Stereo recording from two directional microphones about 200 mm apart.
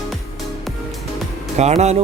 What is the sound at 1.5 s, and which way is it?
Speech, 35° right (ahead or behind).